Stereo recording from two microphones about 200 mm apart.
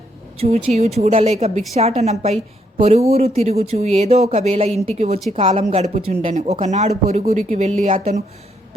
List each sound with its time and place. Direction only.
0.3 s speech: 30° right (ahead or behind)